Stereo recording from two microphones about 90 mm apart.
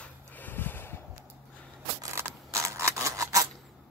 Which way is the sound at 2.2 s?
30° right (ahead or behind).